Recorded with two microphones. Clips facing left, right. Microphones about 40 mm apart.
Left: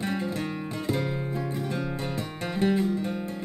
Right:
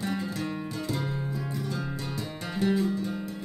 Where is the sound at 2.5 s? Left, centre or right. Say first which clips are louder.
Left 1 dB; left.